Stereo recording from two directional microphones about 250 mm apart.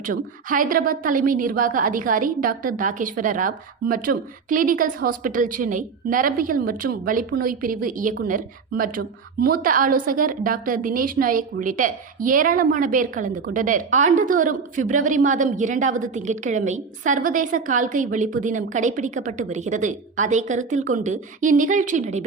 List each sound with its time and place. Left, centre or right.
0.0 s a woman's voice: right
9.4 s a woman's voice: right